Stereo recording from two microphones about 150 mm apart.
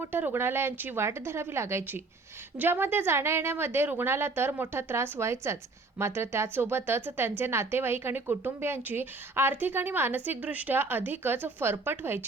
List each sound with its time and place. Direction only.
0.0 s a woman's voice: 15° right (ahead or behind)